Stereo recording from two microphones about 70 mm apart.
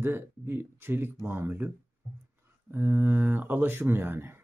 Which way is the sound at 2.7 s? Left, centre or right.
Right.